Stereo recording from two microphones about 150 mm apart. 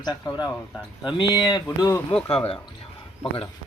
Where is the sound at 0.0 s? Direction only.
30° left (ahead or behind).